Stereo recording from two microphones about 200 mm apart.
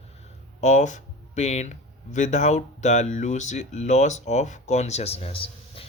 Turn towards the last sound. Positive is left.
turn(degrees=30)  # may be behind; listen again after turning